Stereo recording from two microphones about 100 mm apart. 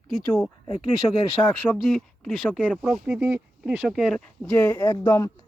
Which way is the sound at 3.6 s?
5° right (ahead or behind).